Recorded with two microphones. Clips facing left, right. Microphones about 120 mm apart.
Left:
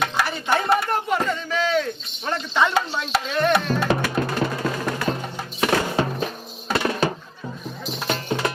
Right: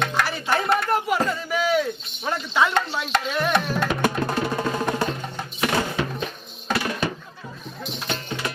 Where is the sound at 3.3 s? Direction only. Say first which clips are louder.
Left 5 dB; centre (ahead or behind).